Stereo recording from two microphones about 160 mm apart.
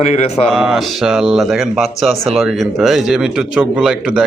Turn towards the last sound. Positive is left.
turn(degrees=-5)  # may be behind; listen again after turning